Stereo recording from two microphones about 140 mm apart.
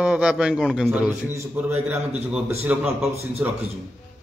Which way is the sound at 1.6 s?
10° right (ahead or behind).